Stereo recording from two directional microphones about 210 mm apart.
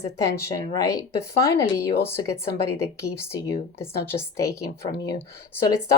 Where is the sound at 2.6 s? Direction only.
15° left (ahead or behind).